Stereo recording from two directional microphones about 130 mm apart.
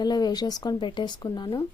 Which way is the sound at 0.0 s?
30° left (ahead or behind).